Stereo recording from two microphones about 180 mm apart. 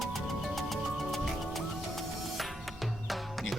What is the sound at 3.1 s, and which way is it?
Music, centre (ahead or behind).